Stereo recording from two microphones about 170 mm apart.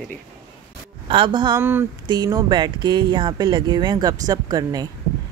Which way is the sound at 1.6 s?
15° right (ahead or behind).